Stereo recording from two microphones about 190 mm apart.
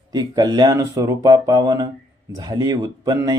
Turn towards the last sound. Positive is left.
turn(degrees=-20)  # may be behind; listen again after turning